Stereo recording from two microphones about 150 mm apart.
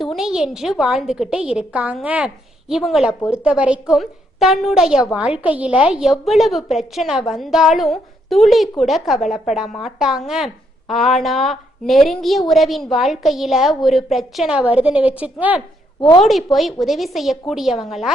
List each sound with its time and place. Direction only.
0.0 s a woman's voice: centre (ahead or behind)
16.0 s a woman's voice: 30° left (ahead or behind)
16.2 s a woman's voice: centre (ahead or behind)